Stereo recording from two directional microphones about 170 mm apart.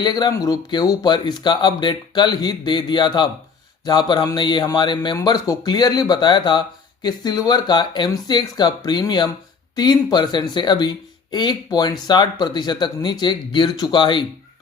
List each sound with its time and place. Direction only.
0.0 s speech: 25° left (ahead or behind)